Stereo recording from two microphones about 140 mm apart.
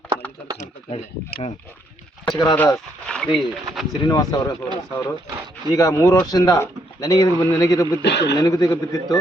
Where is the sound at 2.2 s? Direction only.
30° left (ahead or behind).